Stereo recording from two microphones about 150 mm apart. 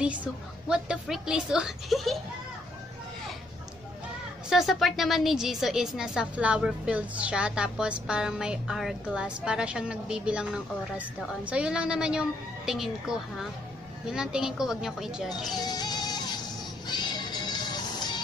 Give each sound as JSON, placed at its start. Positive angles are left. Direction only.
{"t": 0.0, "sound": "a woman's voice", "side_deg": -5}
{"t": 4.5, "sound": "a woman's voice", "side_deg": 0}
{"t": 15.6, "sound": "music", "side_deg": 25}